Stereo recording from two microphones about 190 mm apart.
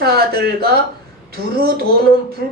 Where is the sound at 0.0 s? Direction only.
55° right (ahead or behind).